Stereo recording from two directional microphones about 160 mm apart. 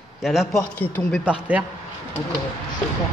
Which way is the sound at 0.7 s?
10° left (ahead or behind).